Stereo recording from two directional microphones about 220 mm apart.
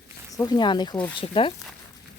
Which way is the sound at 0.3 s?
15° left (ahead or behind).